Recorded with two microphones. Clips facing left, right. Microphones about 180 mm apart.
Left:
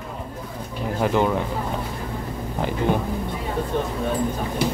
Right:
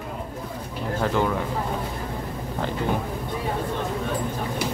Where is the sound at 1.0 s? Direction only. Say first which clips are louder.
Left 3 dB; 15° left (ahead or behind).